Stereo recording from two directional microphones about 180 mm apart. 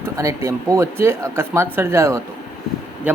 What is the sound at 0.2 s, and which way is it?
Speech, 15° right (ahead or behind).